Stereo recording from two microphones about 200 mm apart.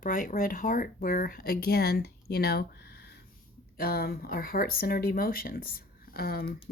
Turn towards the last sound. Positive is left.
turn(degrees=50)  # may be behind; listen again after turning